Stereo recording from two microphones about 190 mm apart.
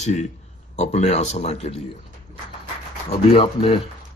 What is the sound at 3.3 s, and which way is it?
Speech, 30° left (ahead or behind).